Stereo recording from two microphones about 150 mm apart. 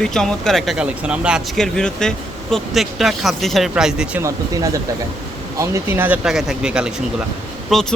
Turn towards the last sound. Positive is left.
turn(degrees=0)  # may be behind; listen again after turning